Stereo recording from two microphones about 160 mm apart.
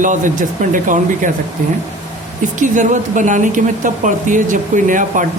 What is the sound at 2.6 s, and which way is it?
Speech, 50° right (ahead or behind).